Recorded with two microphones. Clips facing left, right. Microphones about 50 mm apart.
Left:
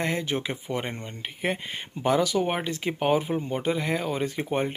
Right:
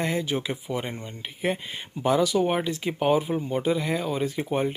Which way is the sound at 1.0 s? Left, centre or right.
Left.